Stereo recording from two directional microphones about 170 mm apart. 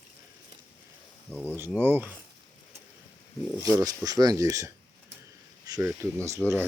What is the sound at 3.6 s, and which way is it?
Speech, 20° right (ahead or behind).